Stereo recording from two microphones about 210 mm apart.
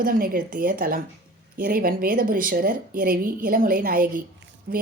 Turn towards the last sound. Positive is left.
turn(degrees=-45)  # may be behind; listen again after turning